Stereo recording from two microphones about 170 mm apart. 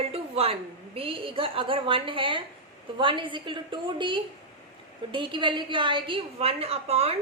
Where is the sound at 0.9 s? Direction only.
30° right (ahead or behind).